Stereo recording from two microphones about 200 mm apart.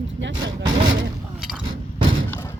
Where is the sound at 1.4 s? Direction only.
5° right (ahead or behind).